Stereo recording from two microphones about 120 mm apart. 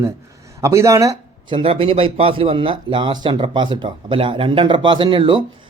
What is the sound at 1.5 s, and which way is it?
A man's voice, 50° right (ahead or behind).